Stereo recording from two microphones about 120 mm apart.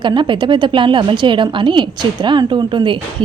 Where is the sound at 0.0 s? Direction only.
40° right (ahead or behind).